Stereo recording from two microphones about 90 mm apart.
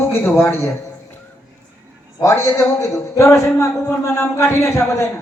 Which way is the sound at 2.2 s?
35° left (ahead or behind).